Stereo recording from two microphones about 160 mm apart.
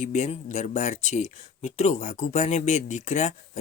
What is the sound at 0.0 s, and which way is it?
Speech, 45° left (ahead or behind).